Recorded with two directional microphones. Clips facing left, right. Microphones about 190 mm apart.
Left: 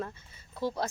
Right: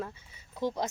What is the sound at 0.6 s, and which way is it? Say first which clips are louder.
Speech: right 1 dB; 20° right (ahead or behind).